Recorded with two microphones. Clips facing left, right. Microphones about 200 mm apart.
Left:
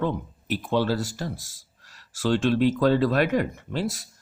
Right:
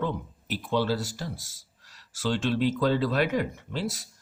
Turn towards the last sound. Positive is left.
turn(degrees=55)  # may be behind; listen again after turning